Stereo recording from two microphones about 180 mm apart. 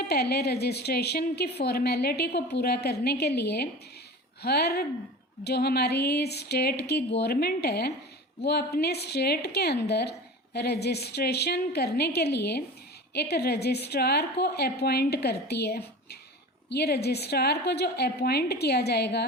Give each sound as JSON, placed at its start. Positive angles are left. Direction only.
{"t": 0.1, "sound": "a woman's voice", "side_deg": 65}